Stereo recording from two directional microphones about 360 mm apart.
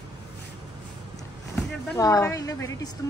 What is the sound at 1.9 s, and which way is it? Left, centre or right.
Speech, centre.